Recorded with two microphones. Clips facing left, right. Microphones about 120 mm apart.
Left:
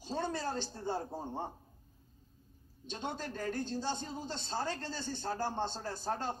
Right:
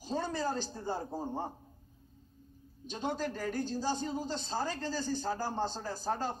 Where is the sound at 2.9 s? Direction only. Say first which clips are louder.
Right 5 dB; 10° right (ahead or behind).